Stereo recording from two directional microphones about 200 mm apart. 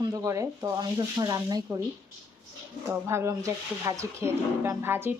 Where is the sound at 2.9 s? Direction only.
15° right (ahead or behind).